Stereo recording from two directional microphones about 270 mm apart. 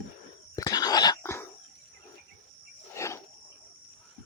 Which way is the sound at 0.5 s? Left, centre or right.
Centre.